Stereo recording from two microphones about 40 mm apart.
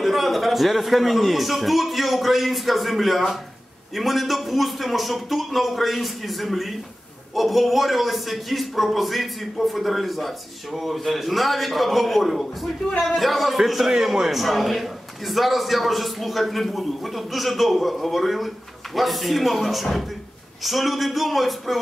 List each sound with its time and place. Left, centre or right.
0.0 s a man's voice: centre